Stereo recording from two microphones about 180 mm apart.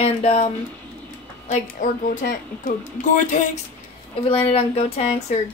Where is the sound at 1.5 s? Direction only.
45° left (ahead or behind).